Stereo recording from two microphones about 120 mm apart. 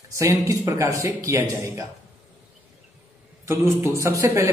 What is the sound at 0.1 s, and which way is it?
A man's voice, 25° right (ahead or behind).